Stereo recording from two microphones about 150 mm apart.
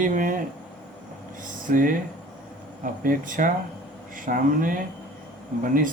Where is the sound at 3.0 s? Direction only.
65° right (ahead or behind).